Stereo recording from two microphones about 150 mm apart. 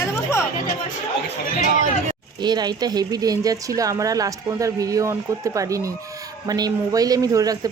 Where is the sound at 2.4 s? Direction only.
30° right (ahead or behind).